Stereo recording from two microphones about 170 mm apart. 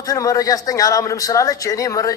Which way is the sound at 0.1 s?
20° left (ahead or behind).